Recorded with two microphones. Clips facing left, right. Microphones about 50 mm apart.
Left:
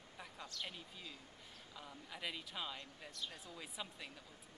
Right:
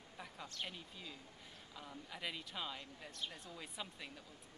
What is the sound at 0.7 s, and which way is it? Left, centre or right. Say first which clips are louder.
Speech: right 1 dB; centre.